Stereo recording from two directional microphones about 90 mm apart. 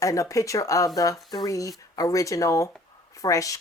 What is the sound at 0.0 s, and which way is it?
Speech, 35° left (ahead or behind).